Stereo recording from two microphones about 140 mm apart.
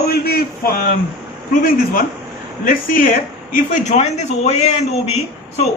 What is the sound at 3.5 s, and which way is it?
A man's voice, 60° left (ahead or behind).